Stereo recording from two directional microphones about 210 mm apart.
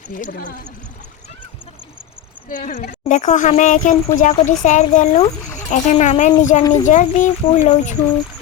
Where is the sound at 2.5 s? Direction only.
40° left (ahead or behind).